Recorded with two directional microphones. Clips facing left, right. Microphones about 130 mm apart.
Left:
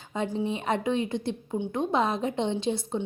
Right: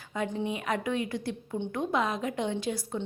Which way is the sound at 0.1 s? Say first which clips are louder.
Left 2 dB; 25° left (ahead or behind).